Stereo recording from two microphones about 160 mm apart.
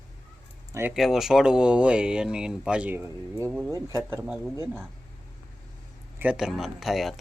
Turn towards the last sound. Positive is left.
turn(degrees=0)  # may be behind; listen again after turning